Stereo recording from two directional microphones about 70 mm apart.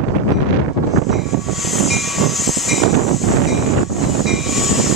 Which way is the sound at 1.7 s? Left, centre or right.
Centre.